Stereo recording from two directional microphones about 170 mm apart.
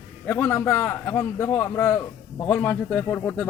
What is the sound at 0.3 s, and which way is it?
Speech, 10° left (ahead or behind).